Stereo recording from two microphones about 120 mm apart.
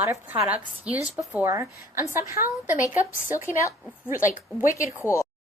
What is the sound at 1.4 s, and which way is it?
A woman's voice, 25° right (ahead or behind).